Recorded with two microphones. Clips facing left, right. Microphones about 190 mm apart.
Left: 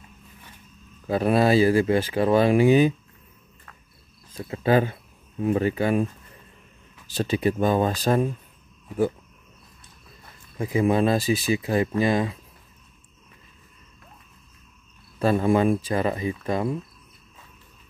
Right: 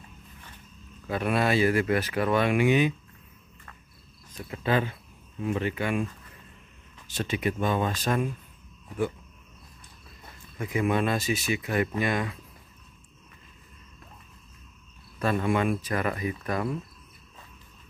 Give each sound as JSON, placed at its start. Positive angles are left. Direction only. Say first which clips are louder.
{"t": 1.0, "sound": "speech", "louder": "left 6 dB", "side_deg": 35}
{"t": 4.6, "sound": "speech", "louder": "left 6 dB", "side_deg": 40}
{"t": 7.1, "sound": "speech", "louder": "left 6 dB", "side_deg": 35}
{"t": 10.6, "sound": "speech", "louder": "left 5 dB", "side_deg": 30}
{"t": 15.1, "sound": "speech", "louder": "left 5 dB", "side_deg": 30}